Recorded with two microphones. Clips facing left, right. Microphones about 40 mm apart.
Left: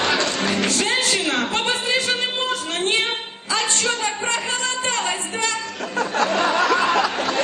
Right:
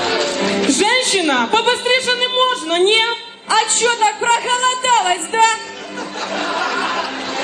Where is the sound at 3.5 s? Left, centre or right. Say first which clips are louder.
Right 7 dB; right.